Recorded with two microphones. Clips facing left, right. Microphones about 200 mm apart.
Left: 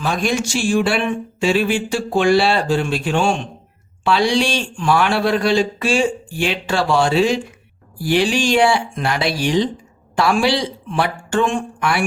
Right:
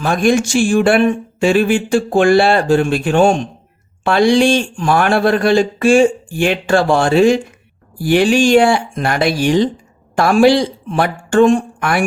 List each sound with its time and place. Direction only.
0.0 s speech: 50° right (ahead or behind)